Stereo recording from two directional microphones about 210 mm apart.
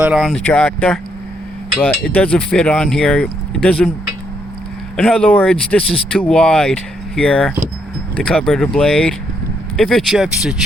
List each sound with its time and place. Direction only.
0.0 s speech: centre (ahead or behind)
4.9 s speech: 5° left (ahead or behind)